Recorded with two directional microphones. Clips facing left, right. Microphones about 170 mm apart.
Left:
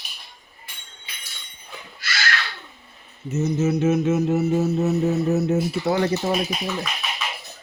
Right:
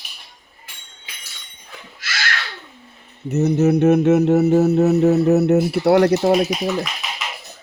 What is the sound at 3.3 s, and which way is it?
Mantra, 65° right (ahead or behind).